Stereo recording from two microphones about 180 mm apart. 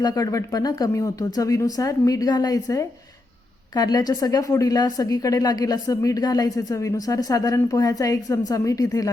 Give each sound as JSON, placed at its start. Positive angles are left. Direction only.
{"t": 0.0, "sound": "a woman's voice", "side_deg": 20}